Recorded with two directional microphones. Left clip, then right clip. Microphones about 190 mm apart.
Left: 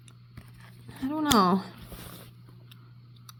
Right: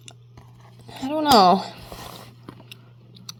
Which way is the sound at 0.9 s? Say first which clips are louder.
Right 7 dB; 40° left (ahead or behind).